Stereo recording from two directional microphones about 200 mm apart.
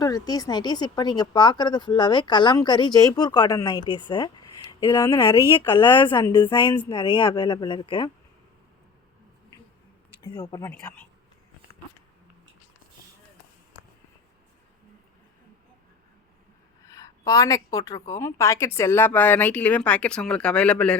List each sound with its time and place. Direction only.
0.0 s speech: 20° left (ahead or behind)
10.2 s a woman's voice: 25° left (ahead or behind)
16.9 s a woman's voice: 15° left (ahead or behind)